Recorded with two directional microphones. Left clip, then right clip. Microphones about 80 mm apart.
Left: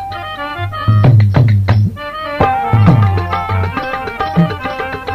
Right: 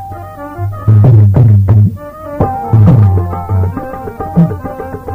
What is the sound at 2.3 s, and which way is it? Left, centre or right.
Music, right.